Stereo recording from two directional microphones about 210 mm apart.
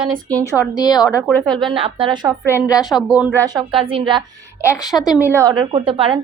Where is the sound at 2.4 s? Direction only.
10° left (ahead or behind).